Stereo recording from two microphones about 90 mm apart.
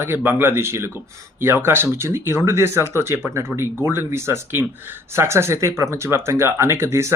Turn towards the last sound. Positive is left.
turn(degrees=-30)  # may be behind; listen again after turning